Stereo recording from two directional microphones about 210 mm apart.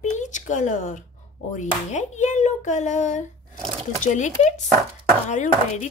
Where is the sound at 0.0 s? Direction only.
35° left (ahead or behind).